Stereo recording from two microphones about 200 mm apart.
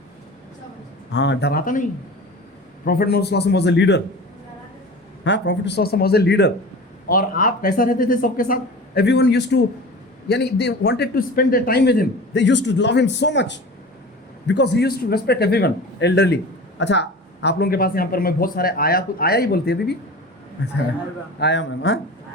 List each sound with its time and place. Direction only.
1.1 s a man's voice: 60° left (ahead or behind)
5.2 s a man's voice: 60° left (ahead or behind)
7.1 s a man's voice: 45° left (ahead or behind)
9.0 s a man's voice: 55° left (ahead or behind)